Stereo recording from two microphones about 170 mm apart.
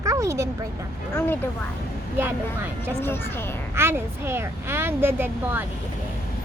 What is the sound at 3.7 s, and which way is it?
Speech, 15° right (ahead or behind).